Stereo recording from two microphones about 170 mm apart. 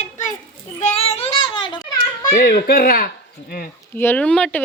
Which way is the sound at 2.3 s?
65° left (ahead or behind).